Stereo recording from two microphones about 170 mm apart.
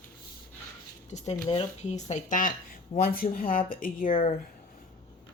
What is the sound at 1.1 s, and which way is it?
Speech, 45° left (ahead or behind).